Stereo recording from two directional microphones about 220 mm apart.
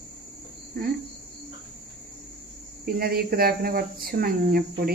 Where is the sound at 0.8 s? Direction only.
40° right (ahead or behind).